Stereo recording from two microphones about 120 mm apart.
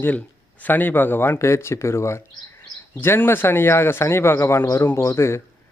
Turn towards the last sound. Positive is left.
turn(degrees=20)  # may be behind; listen again after turning